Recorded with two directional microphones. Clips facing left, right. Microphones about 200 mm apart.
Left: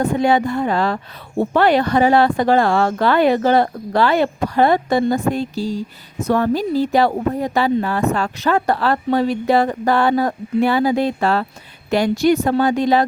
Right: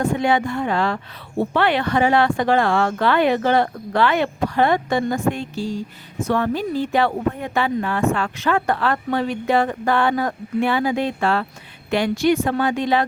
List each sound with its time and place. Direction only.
0.0 s speech: 35° left (ahead or behind)